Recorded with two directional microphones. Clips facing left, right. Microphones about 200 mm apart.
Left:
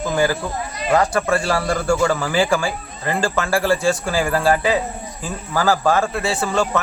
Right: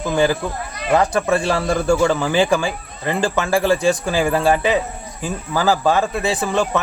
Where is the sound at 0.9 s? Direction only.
20° right (ahead or behind).